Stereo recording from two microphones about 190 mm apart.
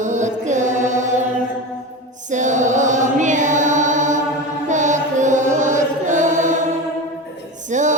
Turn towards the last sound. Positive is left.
turn(degrees=-40)  # may be behind; listen again after turning